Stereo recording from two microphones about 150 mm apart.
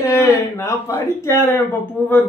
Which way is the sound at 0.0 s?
20° left (ahead or behind).